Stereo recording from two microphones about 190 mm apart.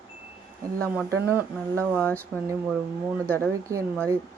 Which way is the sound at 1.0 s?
10° right (ahead or behind).